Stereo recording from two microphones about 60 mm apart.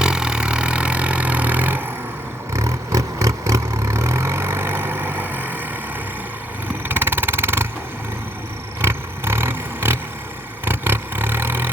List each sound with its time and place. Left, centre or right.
0.0 s vehicle: centre; by 1.8 s right
2.5 s vehicle: right
6.8 s vehicle: right
8.8 s vehicle: right